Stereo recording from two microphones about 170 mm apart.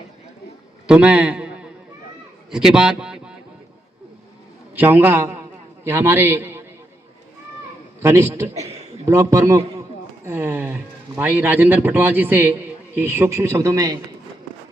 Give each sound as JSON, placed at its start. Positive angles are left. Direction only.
{"t": 0.9, "sound": "a man's voice", "side_deg": -5}
{"t": 4.7, "sound": "a man's voice", "side_deg": -10}
{"t": 8.0, "sound": "a man's voice", "side_deg": -15}